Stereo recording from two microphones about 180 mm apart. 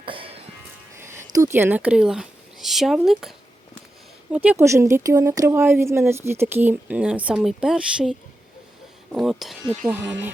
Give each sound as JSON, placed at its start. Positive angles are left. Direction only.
{"t": 0.0, "sound": "music", "side_deg": -30}
{"t": 0.9, "sound": "speech", "side_deg": -15}
{"t": 4.4, "sound": "speech", "side_deg": -15}
{"t": 9.1, "sound": "speech", "side_deg": 0}
{"t": 9.6, "sound": "speech", "side_deg": -15}